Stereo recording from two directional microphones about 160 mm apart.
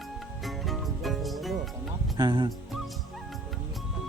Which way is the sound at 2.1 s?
25° right (ahead or behind).